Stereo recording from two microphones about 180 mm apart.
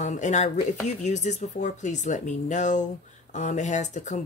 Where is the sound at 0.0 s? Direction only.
40° left (ahead or behind).